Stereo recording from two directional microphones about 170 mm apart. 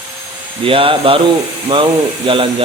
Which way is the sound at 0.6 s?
30° right (ahead or behind).